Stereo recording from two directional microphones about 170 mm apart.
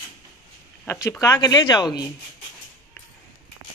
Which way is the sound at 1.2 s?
20° left (ahead or behind).